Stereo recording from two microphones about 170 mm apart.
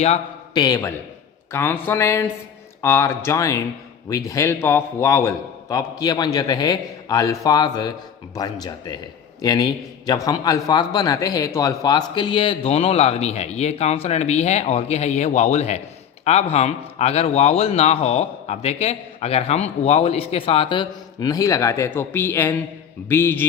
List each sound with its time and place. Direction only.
0.5 s a man's voice: 20° left (ahead or behind)